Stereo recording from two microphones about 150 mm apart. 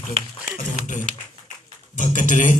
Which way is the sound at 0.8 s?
60° left (ahead or behind).